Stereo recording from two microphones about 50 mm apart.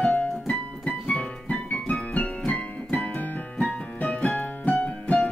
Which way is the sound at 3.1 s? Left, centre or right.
Left.